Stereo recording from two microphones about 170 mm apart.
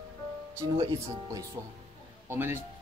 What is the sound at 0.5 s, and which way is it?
Speech, 20° right (ahead or behind).